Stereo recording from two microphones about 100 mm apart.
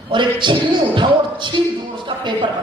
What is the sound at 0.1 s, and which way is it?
A woman's voice, 50° right (ahead or behind).